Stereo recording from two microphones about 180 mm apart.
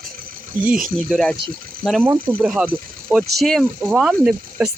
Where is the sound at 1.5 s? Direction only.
50° right (ahead or behind).